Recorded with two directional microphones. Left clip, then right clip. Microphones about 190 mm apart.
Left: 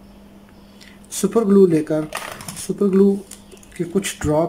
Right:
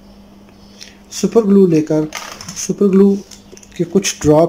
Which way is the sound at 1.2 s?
Centre (ahead or behind).